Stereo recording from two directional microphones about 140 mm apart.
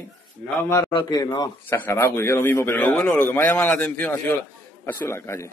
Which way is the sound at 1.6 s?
15° left (ahead or behind).